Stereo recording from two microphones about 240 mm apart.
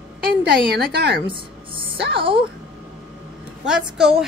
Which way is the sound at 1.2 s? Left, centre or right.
Right.